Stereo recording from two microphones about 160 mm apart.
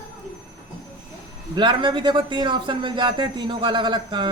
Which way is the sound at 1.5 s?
30° right (ahead or behind).